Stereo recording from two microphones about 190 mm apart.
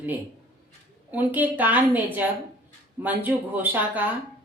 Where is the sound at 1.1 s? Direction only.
10° right (ahead or behind).